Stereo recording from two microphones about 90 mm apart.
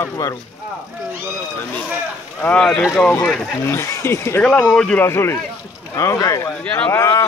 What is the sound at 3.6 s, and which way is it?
Speech, 30° left (ahead or behind).